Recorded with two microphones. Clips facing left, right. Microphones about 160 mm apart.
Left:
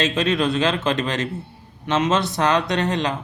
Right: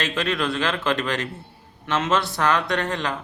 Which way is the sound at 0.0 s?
20° left (ahead or behind).